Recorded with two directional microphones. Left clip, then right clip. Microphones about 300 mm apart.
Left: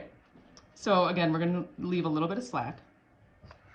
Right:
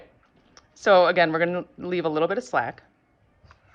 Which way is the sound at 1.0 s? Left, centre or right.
Centre.